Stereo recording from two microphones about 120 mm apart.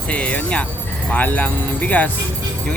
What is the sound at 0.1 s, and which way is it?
A woman's voice, 10° left (ahead or behind).